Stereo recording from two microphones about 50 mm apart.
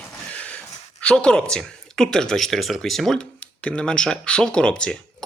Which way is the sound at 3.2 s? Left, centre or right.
Centre.